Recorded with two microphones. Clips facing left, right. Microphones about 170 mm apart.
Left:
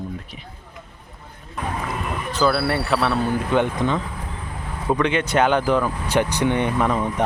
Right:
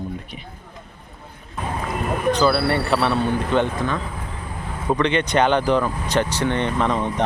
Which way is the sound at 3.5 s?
15° left (ahead or behind).